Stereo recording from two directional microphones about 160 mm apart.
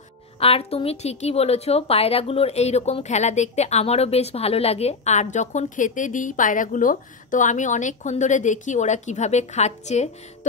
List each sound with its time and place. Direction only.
0.4 s a woman's voice: 40° left (ahead or behind)